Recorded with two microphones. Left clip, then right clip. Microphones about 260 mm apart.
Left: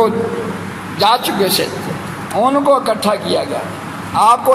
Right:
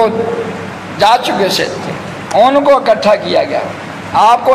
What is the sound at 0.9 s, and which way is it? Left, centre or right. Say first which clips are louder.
A man's voice: right 4 dB; left.